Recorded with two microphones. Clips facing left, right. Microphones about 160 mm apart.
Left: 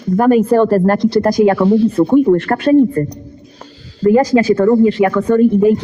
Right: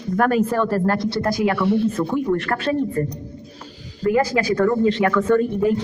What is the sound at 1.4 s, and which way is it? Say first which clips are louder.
Speech: left 7 dB; 35° left (ahead or behind).